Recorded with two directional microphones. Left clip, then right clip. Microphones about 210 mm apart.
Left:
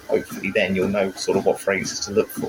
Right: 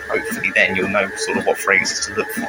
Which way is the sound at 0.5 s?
35° left (ahead or behind).